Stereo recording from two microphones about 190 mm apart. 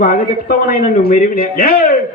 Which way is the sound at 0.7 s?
50° left (ahead or behind).